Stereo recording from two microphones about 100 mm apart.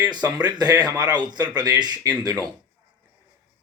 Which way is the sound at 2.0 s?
35° right (ahead or behind).